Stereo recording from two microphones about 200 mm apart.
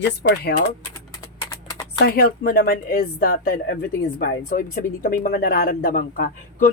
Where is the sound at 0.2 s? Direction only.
55° left (ahead or behind).